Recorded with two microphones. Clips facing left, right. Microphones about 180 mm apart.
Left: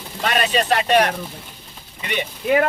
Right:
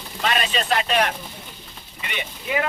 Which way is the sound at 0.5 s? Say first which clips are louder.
Left 5 dB; 40° left (ahead or behind).